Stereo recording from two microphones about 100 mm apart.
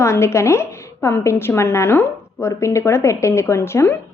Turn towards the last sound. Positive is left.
turn(degrees=25)  # may be behind; listen again after turning